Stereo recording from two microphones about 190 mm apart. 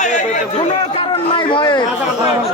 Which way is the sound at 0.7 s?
30° left (ahead or behind).